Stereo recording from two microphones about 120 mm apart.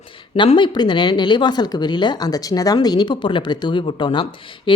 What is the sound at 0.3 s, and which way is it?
Speech, 40° left (ahead or behind).